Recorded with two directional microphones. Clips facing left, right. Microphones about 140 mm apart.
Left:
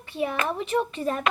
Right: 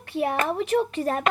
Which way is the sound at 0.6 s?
80° right.